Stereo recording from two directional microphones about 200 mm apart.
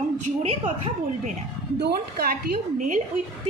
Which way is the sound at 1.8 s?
50° right (ahead or behind).